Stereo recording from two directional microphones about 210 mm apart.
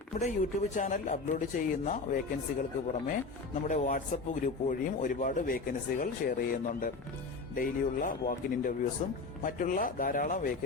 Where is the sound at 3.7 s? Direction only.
35° left (ahead or behind).